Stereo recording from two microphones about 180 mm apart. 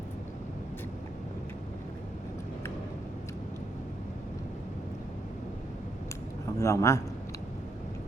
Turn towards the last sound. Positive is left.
turn(degrees=15)  # may be behind; listen again after turning